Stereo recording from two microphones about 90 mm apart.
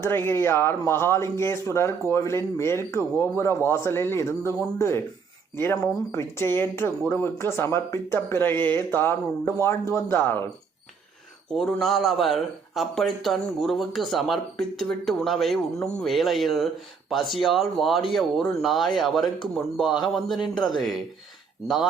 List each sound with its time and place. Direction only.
0.0 s speech: 25° left (ahead or behind)
6.1 s speech: 30° left (ahead or behind)
11.8 s a man's voice: centre (ahead or behind)